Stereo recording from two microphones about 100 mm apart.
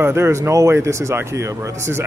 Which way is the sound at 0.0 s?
25° right (ahead or behind).